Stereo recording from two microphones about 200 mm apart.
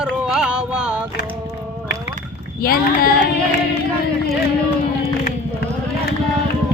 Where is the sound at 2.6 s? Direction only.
45° left (ahead or behind).